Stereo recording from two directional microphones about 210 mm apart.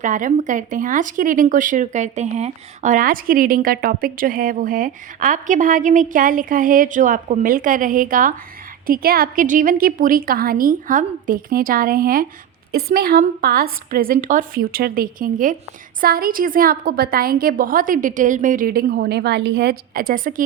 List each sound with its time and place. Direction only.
0.0 s a woman's voice: 35° right (ahead or behind)